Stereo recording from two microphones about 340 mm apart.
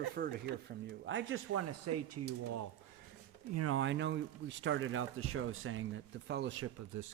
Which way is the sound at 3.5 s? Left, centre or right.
Right.